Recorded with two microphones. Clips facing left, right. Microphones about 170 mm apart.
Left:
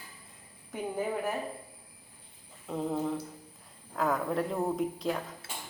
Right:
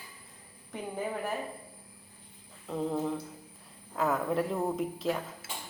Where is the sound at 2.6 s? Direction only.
5° left (ahead or behind).